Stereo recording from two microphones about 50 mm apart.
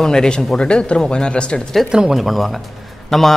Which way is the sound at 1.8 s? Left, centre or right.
Centre.